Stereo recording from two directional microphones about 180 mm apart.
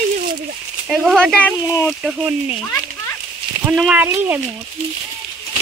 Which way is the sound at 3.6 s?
5° right (ahead or behind).